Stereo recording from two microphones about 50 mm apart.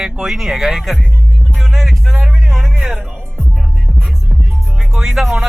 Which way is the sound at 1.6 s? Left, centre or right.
Centre.